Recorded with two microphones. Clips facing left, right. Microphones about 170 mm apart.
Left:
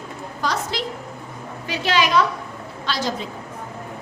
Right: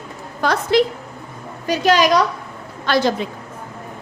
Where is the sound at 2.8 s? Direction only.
60° right (ahead or behind).